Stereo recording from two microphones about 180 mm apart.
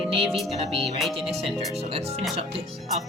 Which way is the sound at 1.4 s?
30° right (ahead or behind).